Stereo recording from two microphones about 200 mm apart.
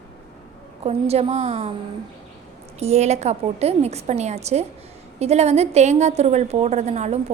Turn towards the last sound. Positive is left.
turn(degrees=-35)  # may be behind; listen again after turning